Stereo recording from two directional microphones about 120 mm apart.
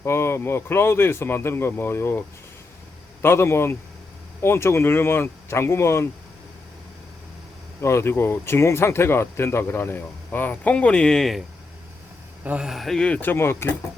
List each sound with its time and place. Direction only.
0.0 s speech: 20° left (ahead or behind)
7.8 s speech: 25° left (ahead or behind); by 11.4 s centre (ahead or behind)
12.5 s speech: 5° right (ahead or behind); by 13.7 s 20° left (ahead or behind)